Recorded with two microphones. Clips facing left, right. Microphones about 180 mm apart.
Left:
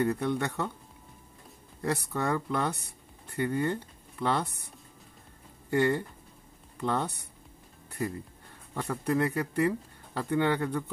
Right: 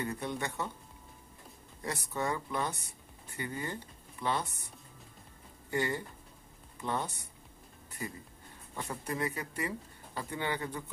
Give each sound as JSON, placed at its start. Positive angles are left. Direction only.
{"t": 0.0, "sound": "speech", "side_deg": 60}
{"t": 1.8, "sound": "speech", "side_deg": 60}
{"t": 5.7, "sound": "speech", "side_deg": 60}
{"t": 8.7, "sound": "speech", "side_deg": 65}